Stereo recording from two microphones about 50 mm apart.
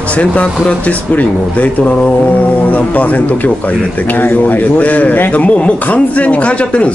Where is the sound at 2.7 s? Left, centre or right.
Left.